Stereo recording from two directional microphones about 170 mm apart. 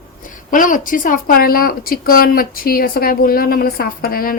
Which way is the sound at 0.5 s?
50° left (ahead or behind).